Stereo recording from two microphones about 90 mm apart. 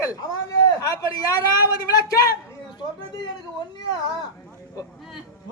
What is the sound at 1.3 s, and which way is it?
A man's voice, 45° left (ahead or behind).